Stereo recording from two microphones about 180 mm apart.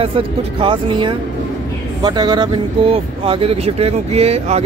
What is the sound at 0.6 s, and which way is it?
Speech, 25° right (ahead or behind).